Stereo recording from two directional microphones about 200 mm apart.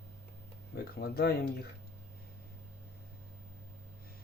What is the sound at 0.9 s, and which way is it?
Speech, 50° left (ahead or behind).